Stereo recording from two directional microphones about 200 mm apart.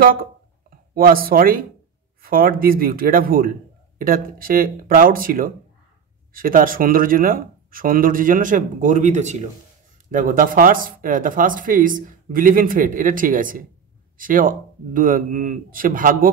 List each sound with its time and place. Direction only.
0.7 s speech: 45° right (ahead or behind)